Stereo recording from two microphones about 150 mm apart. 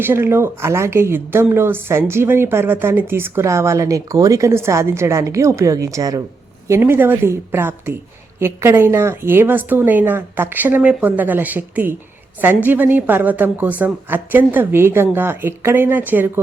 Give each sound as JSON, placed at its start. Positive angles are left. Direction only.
{"t": 0.0, "sound": "a woman's voice", "side_deg": -15}